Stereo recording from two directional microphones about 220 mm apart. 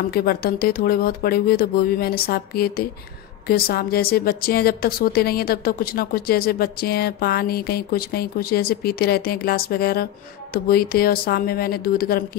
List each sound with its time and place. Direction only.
0.1 s a woman's voice: 45° left (ahead or behind)